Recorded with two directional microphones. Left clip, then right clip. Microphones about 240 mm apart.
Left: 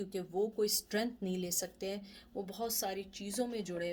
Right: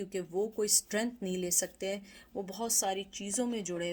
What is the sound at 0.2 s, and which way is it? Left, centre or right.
Speech, right.